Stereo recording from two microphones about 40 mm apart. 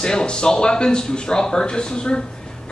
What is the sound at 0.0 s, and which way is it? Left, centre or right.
Speech, centre.